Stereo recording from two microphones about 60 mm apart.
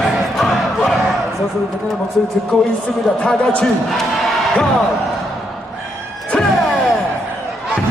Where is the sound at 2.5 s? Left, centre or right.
Centre.